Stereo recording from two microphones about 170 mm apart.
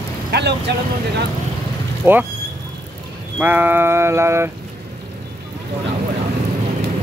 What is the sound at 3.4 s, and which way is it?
Speech, 10° right (ahead or behind).